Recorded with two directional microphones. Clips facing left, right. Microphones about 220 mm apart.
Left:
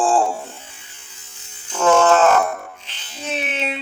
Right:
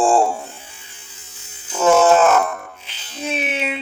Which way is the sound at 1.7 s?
10° right (ahead or behind).